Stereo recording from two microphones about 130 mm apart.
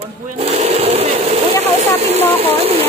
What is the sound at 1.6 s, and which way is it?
Speech, 55° right (ahead or behind).